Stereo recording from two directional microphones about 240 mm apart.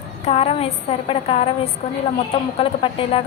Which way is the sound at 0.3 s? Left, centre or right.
Left.